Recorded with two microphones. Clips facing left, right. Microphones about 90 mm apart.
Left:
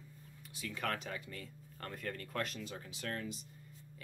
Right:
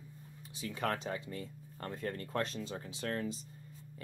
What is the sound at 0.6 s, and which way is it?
Speech, 35° right (ahead or behind).